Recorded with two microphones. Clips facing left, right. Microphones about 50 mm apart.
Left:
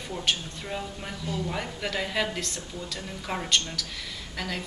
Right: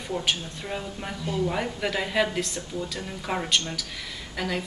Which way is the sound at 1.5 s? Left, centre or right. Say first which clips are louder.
Right 4 dB; centre.